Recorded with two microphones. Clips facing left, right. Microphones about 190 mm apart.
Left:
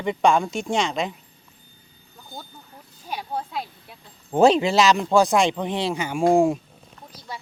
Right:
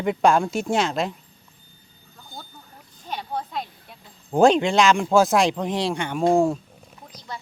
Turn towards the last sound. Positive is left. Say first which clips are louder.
# left 1 dB
turn(degrees=15)  # may be behind; listen again after turning